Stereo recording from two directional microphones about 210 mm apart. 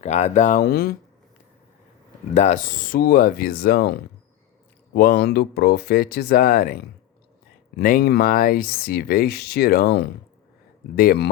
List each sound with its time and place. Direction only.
0.0 s speech: 35° left (ahead or behind)
2.3 s speech: 35° left (ahead or behind)
7.8 s speech: 45° left (ahead or behind)